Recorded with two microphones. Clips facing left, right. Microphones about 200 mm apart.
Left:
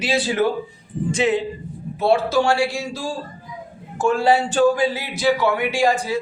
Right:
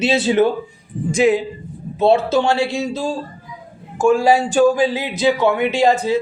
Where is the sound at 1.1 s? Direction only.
10° right (ahead or behind).